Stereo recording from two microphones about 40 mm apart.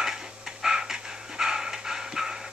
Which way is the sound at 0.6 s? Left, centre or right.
Centre.